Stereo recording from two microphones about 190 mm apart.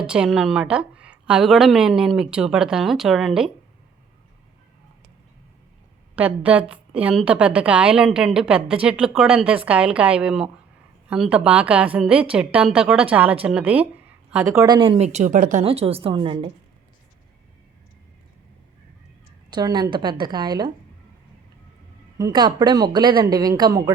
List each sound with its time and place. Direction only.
0.0 s a woman's voice: 5° right (ahead or behind)
6.1 s a woman's voice: 5° right (ahead or behind)
14.6 s speech: 25° right (ahead or behind); by 15.6 s 45° right (ahead or behind)
15.6 s a woman's voice: 30° right (ahead or behind)
19.5 s a woman's voice: 20° right (ahead or behind)
22.2 s a woman's voice: 25° right (ahead or behind)